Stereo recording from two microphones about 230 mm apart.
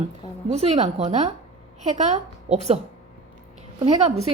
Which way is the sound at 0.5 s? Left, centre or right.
Right.